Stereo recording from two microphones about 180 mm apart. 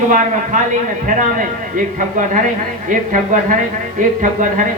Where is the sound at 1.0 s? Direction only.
45° right (ahead or behind).